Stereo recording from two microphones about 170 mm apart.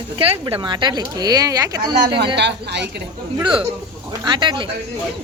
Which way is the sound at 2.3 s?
80° right.